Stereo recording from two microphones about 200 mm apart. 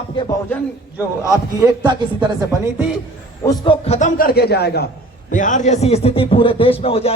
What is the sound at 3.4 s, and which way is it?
Music, 25° left (ahead or behind).